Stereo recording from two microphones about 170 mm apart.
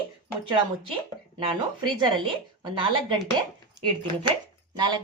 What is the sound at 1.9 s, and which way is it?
Speech, 30° right (ahead or behind).